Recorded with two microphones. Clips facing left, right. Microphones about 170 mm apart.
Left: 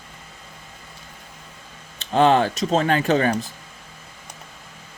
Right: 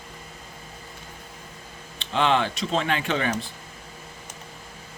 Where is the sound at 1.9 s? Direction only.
40° left (ahead or behind).